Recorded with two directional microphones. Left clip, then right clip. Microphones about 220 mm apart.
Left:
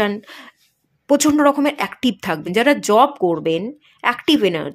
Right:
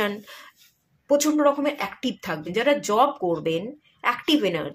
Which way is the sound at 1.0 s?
45° left (ahead or behind).